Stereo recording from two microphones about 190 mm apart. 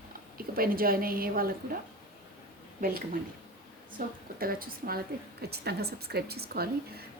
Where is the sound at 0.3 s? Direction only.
50° right (ahead or behind).